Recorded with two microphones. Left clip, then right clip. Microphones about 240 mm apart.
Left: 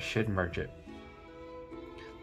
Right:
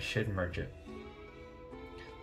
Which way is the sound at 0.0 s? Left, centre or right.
Centre.